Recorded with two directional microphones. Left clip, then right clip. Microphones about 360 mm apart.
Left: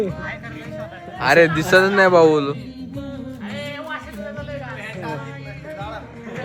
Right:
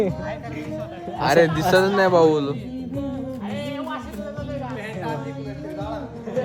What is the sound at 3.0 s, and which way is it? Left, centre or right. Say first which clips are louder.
Music: right 3 dB; centre.